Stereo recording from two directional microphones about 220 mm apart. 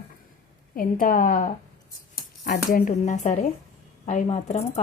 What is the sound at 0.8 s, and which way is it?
Speech, 40° left (ahead or behind).